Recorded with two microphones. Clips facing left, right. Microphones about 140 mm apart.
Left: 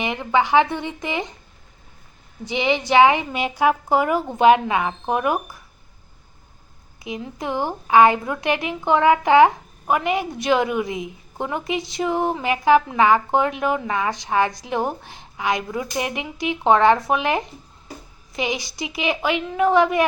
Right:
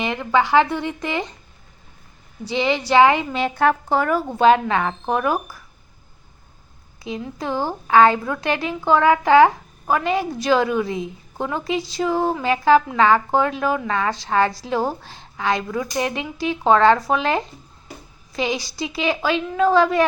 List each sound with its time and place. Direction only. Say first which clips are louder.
0.0 s a woman's voice: right 1 dB; 15° left (ahead or behind)
2.4 s a woman's voice: even; 20° left (ahead or behind)
7.0 s speech: right 1 dB; 20° left (ahead or behind)